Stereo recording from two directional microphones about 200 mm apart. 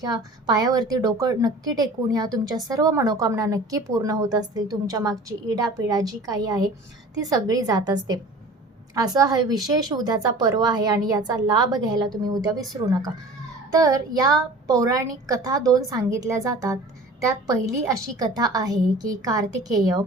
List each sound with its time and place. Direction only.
0.0 s a woman's voice: 20° right (ahead or behind)